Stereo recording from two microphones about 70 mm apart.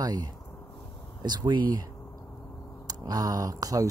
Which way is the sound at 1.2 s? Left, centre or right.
Right.